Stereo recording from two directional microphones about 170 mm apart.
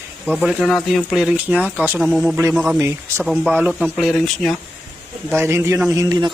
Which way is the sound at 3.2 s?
Centre (ahead or behind).